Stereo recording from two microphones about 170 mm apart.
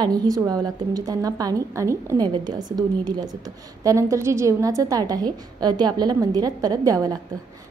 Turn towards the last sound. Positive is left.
turn(degrees=-20)  # may be behind; listen again after turning